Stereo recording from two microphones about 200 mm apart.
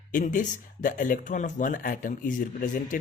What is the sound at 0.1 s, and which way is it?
Speech, 40° left (ahead or behind).